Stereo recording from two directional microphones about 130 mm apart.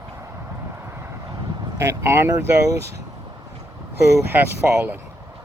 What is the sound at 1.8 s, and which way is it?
Speech, 20° right (ahead or behind).